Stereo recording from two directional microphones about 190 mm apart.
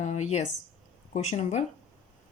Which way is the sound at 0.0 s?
35° left (ahead or behind).